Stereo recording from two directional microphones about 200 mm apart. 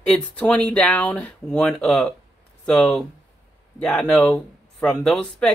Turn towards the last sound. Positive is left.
turn(degrees=5)  # may be behind; listen again after turning